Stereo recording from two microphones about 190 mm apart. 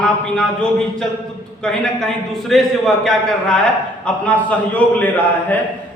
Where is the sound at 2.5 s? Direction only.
Centre (ahead or behind).